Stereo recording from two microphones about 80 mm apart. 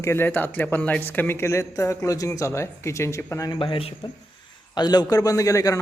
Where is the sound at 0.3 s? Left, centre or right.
Left.